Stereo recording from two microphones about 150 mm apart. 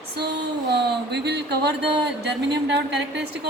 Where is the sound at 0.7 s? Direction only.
90° right.